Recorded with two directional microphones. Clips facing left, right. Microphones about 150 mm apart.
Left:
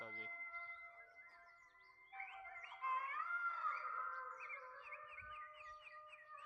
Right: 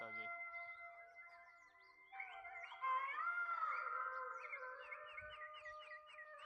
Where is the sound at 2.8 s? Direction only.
50° right (ahead or behind).